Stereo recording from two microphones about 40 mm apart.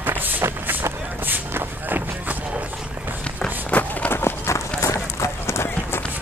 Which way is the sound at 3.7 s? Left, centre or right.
Left.